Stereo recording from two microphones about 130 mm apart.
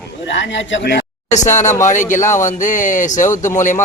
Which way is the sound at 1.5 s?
65° left (ahead or behind).